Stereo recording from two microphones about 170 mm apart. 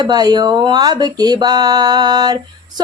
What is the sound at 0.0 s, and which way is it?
Speech, 25° right (ahead or behind).